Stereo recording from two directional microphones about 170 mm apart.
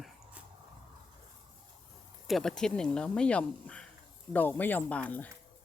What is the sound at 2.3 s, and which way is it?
Speech, 5° left (ahead or behind).